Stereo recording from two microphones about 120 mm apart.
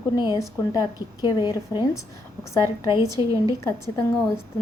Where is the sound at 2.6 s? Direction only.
25° right (ahead or behind).